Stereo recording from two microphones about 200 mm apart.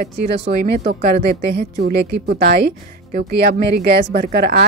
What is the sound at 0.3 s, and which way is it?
Speech, 35° right (ahead or behind).